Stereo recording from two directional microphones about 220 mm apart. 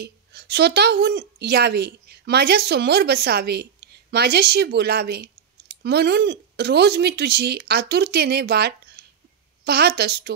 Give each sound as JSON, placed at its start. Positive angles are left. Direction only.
{"t": 0.0, "sound": "a woman's voice", "side_deg": -50}